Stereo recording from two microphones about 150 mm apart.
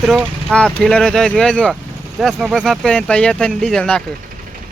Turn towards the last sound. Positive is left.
turn(degrees=5)  # may be behind; listen again after turning